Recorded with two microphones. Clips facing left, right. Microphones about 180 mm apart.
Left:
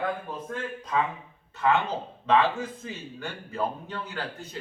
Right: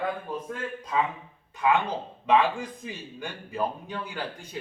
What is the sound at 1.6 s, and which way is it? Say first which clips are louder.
A man's voice: even; 10° right (ahead or behind).